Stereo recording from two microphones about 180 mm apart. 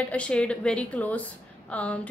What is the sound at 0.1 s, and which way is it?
A woman's voice, 5° left (ahead or behind).